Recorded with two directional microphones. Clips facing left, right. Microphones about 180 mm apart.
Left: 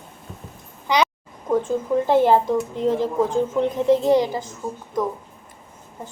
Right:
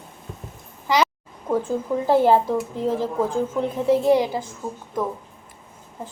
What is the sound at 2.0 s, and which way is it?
Speech, 10° right (ahead or behind).